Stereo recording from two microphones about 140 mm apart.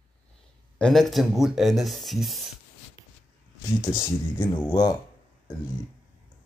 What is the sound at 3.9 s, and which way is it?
Speech, 25° left (ahead or behind).